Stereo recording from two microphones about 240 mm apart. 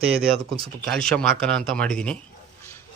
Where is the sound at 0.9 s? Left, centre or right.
Centre.